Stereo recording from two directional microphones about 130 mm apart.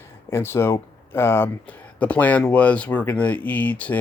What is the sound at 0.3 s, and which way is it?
Speech, 20° left (ahead or behind).